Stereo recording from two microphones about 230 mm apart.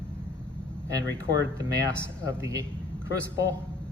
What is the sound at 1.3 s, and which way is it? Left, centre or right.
Speech, centre.